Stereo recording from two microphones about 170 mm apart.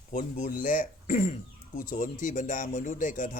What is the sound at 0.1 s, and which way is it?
A man's voice, 50° left (ahead or behind).